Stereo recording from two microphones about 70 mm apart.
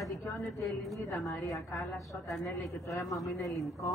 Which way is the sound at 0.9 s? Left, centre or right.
Left.